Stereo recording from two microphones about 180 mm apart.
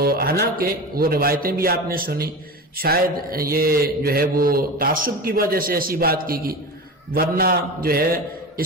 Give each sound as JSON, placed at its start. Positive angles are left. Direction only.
{"t": 0.0, "sound": "a man's voice", "side_deg": -55}